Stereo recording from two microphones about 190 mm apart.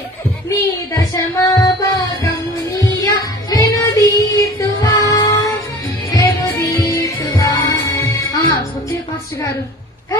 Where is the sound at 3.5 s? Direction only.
20° left (ahead or behind).